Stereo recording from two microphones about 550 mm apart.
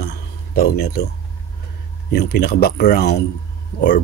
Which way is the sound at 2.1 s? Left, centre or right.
Centre.